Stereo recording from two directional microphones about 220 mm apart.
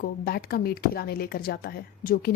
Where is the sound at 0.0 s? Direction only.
45° left (ahead or behind).